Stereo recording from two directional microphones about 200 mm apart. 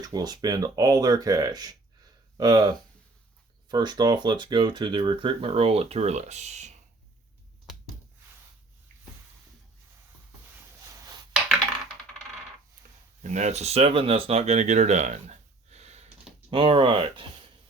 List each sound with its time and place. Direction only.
0.0 s speech: 20° right (ahead or behind)
3.7 s speech: 20° right (ahead or behind)
13.2 s speech: 35° right (ahead or behind)